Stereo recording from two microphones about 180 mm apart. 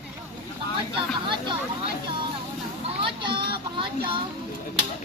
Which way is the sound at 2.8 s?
30° right (ahead or behind).